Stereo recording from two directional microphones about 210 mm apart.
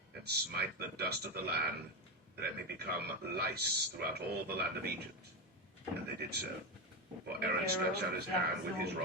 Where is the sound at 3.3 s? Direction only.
50° right (ahead or behind).